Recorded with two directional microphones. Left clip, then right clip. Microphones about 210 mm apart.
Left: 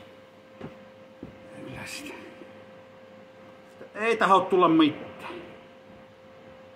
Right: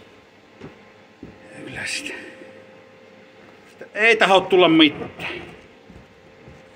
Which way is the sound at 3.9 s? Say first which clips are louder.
Right 7 dB; 35° left (ahead or behind).